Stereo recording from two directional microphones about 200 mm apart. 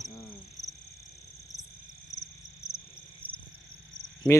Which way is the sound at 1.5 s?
15° left (ahead or behind).